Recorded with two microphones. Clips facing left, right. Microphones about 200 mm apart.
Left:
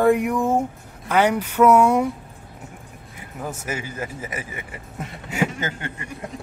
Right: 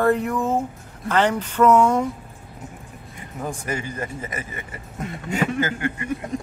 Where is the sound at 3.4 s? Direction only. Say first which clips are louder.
Right 1 dB; 5° left (ahead or behind).